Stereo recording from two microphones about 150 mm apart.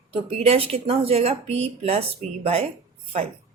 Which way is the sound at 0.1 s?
40° right (ahead or behind).